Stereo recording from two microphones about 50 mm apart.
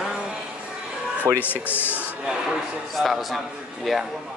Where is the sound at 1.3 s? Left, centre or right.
Left.